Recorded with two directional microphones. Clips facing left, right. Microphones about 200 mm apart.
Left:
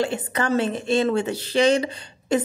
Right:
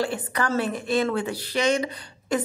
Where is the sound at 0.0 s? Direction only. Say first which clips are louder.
Left 2 dB; 25° left (ahead or behind).